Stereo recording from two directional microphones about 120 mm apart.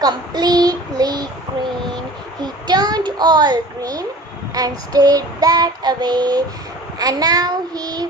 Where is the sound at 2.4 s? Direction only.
35° right (ahead or behind).